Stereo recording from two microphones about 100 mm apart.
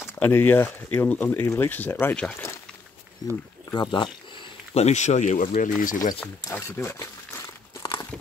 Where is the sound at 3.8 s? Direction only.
50° left (ahead or behind).